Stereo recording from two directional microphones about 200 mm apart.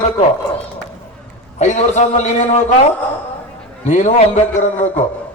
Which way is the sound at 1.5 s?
35° left (ahead or behind).